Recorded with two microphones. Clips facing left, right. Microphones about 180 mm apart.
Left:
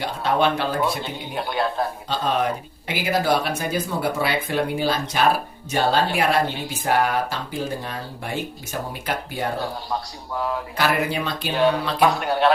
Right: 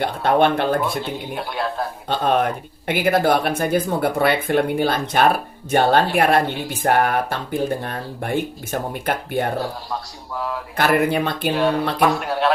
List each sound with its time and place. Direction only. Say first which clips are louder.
0.0 s a man's voice: right 4 dB; 55° right (ahead or behind)
0.8 s a man's voice: right 1 dB; centre (ahead or behind)
2.0 s speech: right 6 dB; 55° right (ahead or behind)
9.9 s a man's voice: left 1 dB; centre (ahead or behind)
10.8 s speech: right 6 dB; 55° right (ahead or behind)
11.9 s a man's voice: even; centre (ahead or behind)